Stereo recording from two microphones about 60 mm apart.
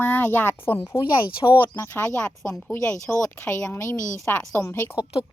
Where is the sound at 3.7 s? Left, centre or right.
Left.